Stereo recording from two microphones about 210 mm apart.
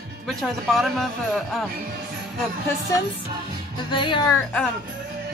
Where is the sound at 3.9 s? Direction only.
20° left (ahead or behind).